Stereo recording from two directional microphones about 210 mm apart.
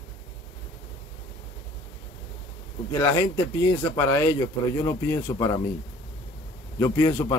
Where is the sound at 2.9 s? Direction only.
15° left (ahead or behind).